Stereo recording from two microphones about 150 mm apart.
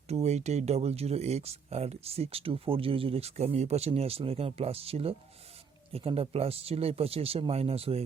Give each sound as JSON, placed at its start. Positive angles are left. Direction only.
{"t": 0.1, "sound": "speech", "side_deg": -45}